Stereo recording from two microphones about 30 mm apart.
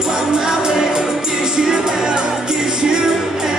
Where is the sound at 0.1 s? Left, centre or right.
Right.